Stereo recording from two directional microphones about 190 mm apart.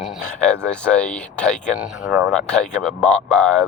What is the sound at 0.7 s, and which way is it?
Speech, 5° left (ahead or behind).